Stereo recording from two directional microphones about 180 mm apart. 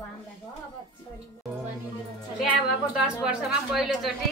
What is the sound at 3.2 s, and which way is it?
Speech, 5° right (ahead or behind).